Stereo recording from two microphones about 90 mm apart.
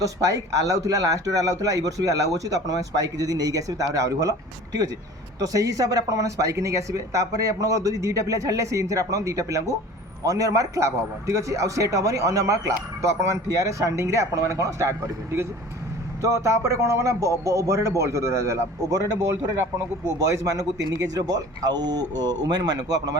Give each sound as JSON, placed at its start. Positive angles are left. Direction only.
{"t": 0.0, "sound": "a man's voice", "side_deg": -40}